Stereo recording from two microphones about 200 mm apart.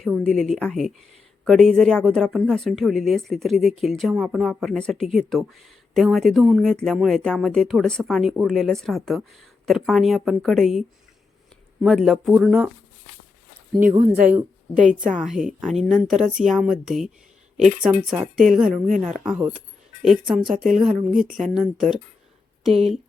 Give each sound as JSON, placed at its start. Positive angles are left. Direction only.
{"t": 0.0, "sound": "a woman's voice", "side_deg": 0}
{"t": 13.8, "sound": "speech", "side_deg": -35}
{"t": 15.2, "sound": "a woman's voice", "side_deg": 0}
{"t": 18.9, "sound": "speech", "side_deg": -40}
{"t": 20.0, "sound": "a woman's voice", "side_deg": 0}
{"t": 21.2, "sound": "speech", "side_deg": -40}
{"t": 21.5, "sound": "a woman's voice", "side_deg": 0}